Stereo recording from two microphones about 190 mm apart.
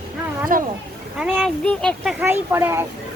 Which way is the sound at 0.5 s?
45° right (ahead or behind).